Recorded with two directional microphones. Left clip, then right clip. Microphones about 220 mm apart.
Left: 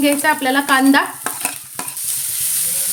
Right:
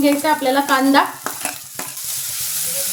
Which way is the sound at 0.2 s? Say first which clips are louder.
Left 1 dB; 50° left (ahead or behind).